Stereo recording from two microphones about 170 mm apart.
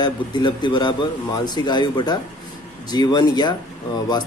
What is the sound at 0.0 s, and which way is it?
Speech, 25° left (ahead or behind).